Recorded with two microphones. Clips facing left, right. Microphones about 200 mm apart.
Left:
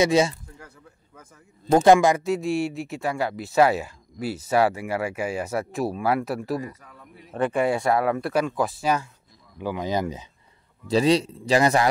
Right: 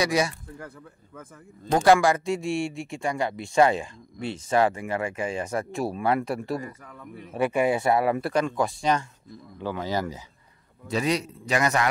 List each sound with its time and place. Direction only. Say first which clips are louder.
0.0 s speech: left 5 dB; 25° left (ahead or behind)
1.8 s speech: left 2 dB; 20° left (ahead or behind)
2.2 s speech: left 3 dB; centre (ahead or behind)
7.3 s speech: even; 10° right (ahead or behind); by 10.2 s 20° left (ahead or behind)
10.9 s a man's voice: left 6 dB; 30° left (ahead or behind)